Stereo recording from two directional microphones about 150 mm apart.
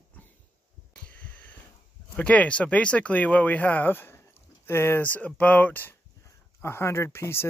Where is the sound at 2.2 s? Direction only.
10° left (ahead or behind).